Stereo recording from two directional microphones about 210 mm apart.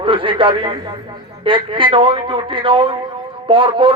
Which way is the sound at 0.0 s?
25° right (ahead or behind).